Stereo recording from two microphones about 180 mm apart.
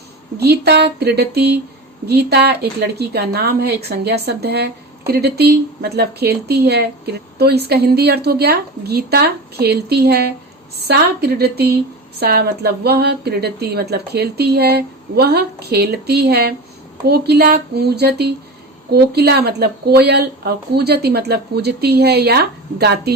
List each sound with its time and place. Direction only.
0.3 s speech: 65° right (ahead or behind)